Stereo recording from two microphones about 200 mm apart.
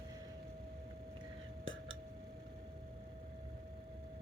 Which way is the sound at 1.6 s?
75° right (ahead or behind).